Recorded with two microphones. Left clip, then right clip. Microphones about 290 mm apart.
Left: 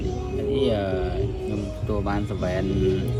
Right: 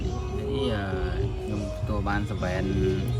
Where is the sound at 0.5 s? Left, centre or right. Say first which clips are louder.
Left 6 dB; centre.